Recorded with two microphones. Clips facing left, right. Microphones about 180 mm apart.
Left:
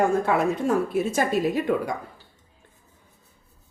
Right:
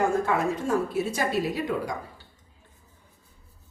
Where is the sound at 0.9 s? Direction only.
50° left (ahead or behind).